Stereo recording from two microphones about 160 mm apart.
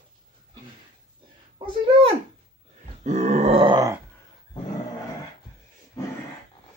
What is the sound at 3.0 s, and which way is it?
Grunt, 45° right (ahead or behind).